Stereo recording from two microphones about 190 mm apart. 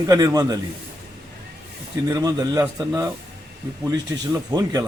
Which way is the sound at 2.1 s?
20° right (ahead or behind).